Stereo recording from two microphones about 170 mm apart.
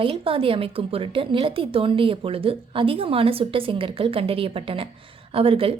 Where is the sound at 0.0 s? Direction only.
35° right (ahead or behind).